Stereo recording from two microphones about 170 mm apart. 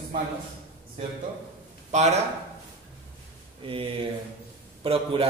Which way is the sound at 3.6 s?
30° right (ahead or behind).